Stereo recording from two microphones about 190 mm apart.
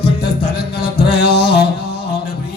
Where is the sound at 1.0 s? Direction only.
55° left (ahead or behind).